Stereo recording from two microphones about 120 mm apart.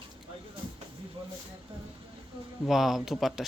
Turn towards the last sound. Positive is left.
turn(degrees=0)  # may be behind; listen again after turning